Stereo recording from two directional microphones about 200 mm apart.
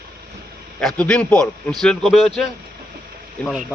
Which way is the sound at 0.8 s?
5° left (ahead or behind).